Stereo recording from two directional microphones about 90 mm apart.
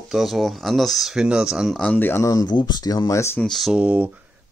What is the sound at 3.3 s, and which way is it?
Speech, 5° left (ahead or behind).